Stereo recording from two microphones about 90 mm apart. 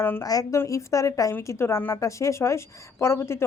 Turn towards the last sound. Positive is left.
turn(degrees=30)  # may be behind; listen again after turning